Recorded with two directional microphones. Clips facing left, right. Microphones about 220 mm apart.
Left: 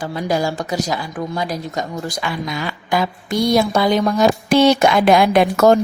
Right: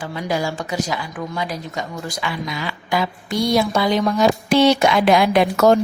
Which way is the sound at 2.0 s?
45° left (ahead or behind).